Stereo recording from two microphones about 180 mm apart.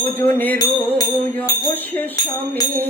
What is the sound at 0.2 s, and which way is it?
Music, 10° left (ahead or behind).